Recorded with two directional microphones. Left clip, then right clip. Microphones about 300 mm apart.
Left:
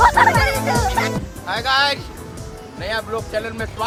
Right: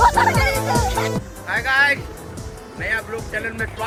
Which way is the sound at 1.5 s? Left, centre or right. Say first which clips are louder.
Right 1 dB; centre.